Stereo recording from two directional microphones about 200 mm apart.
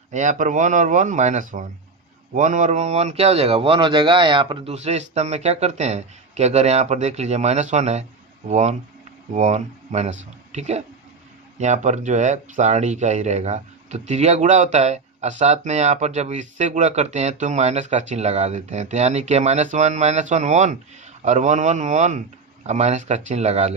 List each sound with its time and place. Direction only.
0.1 s speech: 40° right (ahead or behind)